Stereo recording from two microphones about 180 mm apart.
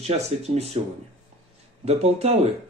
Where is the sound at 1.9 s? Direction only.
35° right (ahead or behind).